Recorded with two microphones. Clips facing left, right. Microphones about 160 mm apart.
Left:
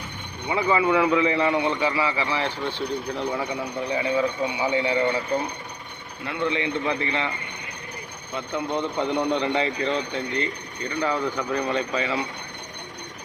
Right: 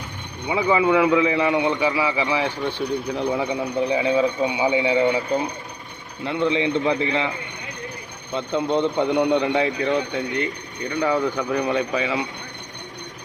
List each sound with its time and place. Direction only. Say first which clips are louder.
0.4 s a man's voice: right 3 dB; 15° right (ahead or behind)
6.2 s a man's voice: right 5 dB; 20° right (ahead or behind)
8.4 s a man's voice: right 6 dB; 20° right (ahead or behind)